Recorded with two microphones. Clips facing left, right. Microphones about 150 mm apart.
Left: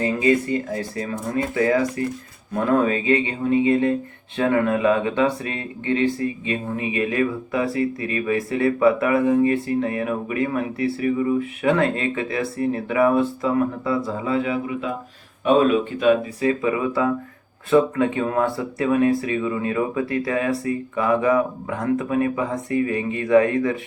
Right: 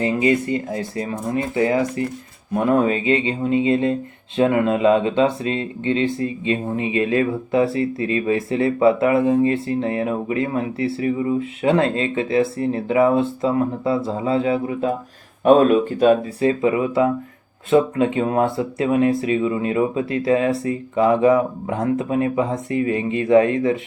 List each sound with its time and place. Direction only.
0.0 s speech: 25° right (ahead or behind)